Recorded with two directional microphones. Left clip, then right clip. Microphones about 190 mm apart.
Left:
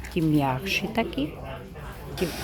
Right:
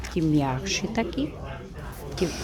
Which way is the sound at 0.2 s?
5° right (ahead or behind).